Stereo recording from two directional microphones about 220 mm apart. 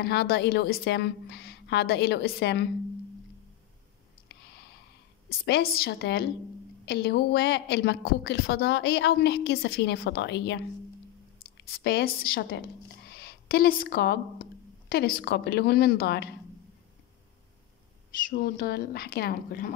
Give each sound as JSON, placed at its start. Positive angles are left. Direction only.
{"t": 0.0, "sound": "a woman's voice", "side_deg": 45}
{"t": 5.4, "sound": "a woman's voice", "side_deg": 45}
{"t": 18.3, "sound": "a woman's voice", "side_deg": 40}